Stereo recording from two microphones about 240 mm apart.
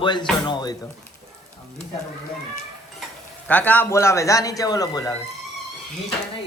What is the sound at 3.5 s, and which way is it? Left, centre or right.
A man's voice, centre.